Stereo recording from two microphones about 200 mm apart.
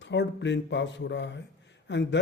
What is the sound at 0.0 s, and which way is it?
Speech, 60° left (ahead or behind).